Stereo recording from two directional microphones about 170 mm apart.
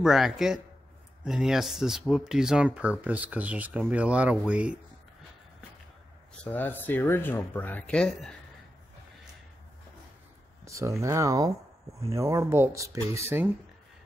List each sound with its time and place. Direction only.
0.0 s speech: 5° right (ahead or behind)
6.3 s speech: 10° left (ahead or behind)
10.6 s speech: 20° right (ahead or behind)